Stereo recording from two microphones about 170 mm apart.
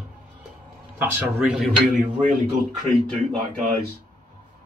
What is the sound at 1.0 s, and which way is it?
Speech, 5° right (ahead or behind).